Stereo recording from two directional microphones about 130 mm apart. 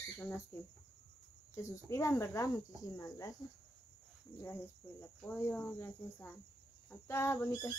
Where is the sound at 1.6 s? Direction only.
20° left (ahead or behind).